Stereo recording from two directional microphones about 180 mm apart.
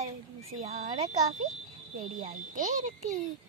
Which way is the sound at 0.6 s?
40° right (ahead or behind).